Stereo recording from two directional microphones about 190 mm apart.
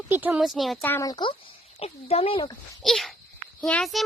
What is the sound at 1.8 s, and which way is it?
Speech, 30° left (ahead or behind).